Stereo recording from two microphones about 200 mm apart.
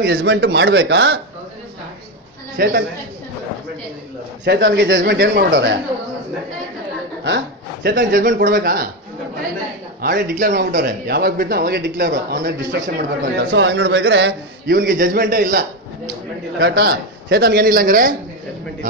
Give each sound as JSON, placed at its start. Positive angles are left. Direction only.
{"t": 0.0, "sound": "speech", "side_deg": -55}
{"t": 2.5, "sound": "speech", "side_deg": -55}
{"t": 4.5, "sound": "speech", "side_deg": -60}
{"t": 7.2, "sound": "speech", "side_deg": -55}
{"t": 7.9, "sound": "speech", "side_deg": -45}
{"t": 10.0, "sound": "speech", "side_deg": -45}
{"t": 16.5, "sound": "speech", "side_deg": -55}